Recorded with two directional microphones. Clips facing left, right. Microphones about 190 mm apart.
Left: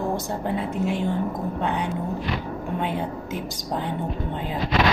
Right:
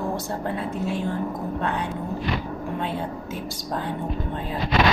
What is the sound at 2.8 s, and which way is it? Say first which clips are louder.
Speech: left 1 dB; 15° left (ahead or behind).